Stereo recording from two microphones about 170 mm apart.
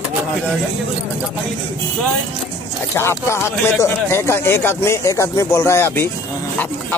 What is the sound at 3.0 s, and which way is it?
Speech, 15° left (ahead or behind).